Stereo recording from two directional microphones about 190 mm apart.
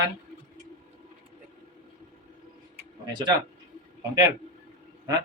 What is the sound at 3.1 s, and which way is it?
Speech, 25° right (ahead or behind).